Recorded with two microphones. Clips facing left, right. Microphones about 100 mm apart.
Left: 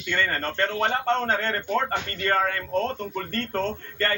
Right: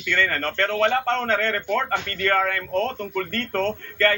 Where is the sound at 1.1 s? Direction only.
20° left (ahead or behind).